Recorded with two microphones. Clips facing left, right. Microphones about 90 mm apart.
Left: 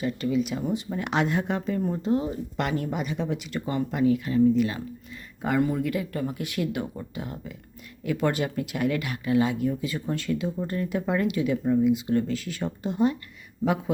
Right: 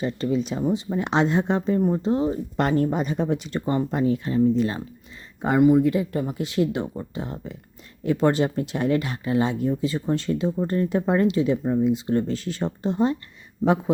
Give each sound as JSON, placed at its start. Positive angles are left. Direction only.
{"t": 0.0, "sound": "speech", "side_deg": -35}
{"t": 5.4, "sound": "speech", "side_deg": -25}